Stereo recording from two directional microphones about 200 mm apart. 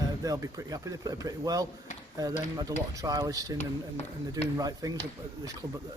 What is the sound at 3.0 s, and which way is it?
Speech, 20° right (ahead or behind).